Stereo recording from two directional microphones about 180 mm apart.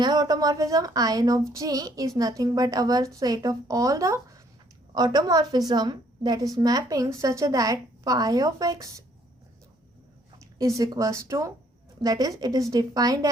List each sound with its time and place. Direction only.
0.0 s a woman's voice: 20° right (ahead or behind)
10.3 s a woman's voice: 20° right (ahead or behind)